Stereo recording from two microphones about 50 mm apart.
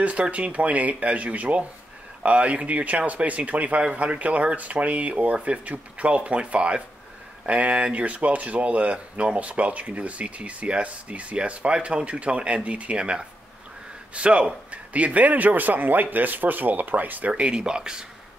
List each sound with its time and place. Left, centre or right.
0.0 s speech: right
17.3 s speech: centre